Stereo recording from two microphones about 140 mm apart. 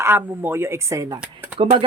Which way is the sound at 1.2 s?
10° right (ahead or behind).